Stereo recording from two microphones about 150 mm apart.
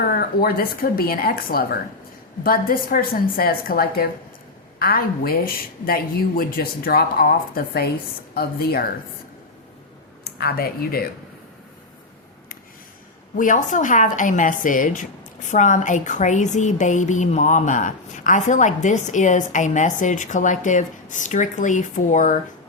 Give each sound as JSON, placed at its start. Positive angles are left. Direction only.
{"t": 0.1, "sound": "a woman's voice", "side_deg": 80}
{"t": 10.2, "sound": "speech", "side_deg": 90}
{"t": 13.3, "sound": "a woman's voice", "side_deg": 60}